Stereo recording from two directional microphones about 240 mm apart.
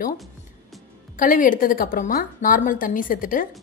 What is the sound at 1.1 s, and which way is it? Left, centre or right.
A woman's voice, left.